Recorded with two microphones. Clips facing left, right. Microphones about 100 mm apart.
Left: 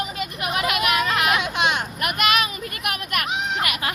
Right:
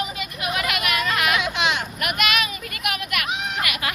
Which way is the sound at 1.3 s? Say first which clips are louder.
Left 1 dB; 45° left (ahead or behind).